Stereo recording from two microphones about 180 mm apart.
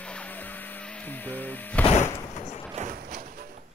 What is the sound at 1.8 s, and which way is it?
Music, 40° left (ahead or behind).